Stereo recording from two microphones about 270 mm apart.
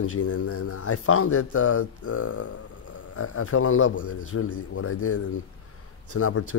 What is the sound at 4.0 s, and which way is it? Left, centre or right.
Speech, left.